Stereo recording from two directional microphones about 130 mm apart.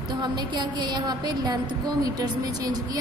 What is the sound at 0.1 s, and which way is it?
A woman's voice, 35° right (ahead or behind).